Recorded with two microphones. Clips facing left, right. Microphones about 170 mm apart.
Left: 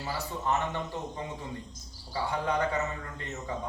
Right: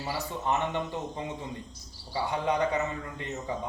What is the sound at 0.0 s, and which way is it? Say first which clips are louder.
Speech: right 1 dB; 15° right (ahead or behind).